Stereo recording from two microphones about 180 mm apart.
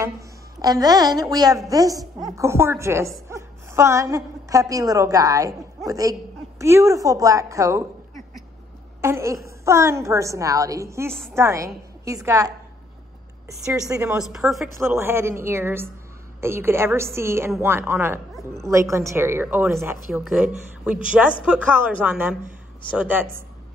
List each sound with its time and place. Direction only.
0.6 s a woman's voice: 20° right (ahead or behind)
9.0 s a woman's voice: 15° right (ahead or behind)
13.8 s a woman's voice: 20° right (ahead or behind)
14.1 s a woman's voice: centre (ahead or behind)
14.8 s a woman's voice: 15° right (ahead or behind)